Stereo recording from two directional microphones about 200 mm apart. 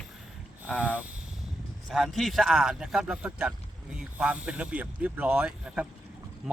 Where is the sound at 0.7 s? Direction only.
5° right (ahead or behind).